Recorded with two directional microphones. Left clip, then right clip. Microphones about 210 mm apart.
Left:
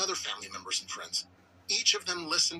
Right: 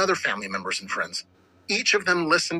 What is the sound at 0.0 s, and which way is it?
Speech, 35° right (ahead or behind).